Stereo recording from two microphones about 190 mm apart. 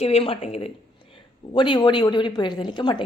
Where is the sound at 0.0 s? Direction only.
30° left (ahead or behind).